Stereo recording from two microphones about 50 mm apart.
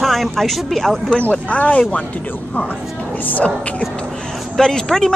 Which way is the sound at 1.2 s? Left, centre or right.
Left.